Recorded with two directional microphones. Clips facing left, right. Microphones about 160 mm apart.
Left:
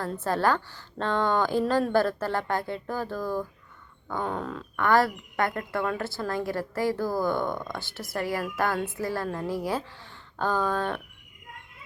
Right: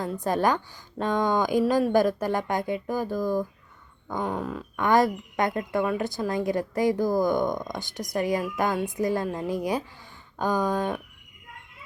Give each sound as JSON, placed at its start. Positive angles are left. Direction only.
{"t": 0.0, "sound": "a woman's voice", "side_deg": -15}